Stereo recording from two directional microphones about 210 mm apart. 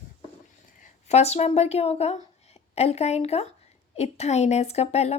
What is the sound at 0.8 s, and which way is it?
A woman's voice, 30° left (ahead or behind).